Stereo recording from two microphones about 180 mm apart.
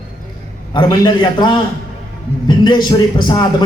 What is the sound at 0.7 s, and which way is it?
A man's voice, 25° left (ahead or behind).